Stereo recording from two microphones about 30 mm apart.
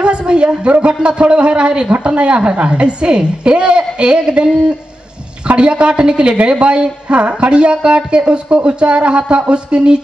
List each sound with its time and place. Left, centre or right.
0.0 s a sound: right
0.7 s speech: right
5.6 s speech: right